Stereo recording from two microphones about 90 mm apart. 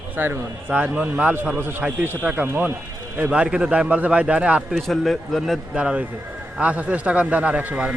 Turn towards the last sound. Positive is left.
turn(degrees=-15)  # may be behind; listen again after turning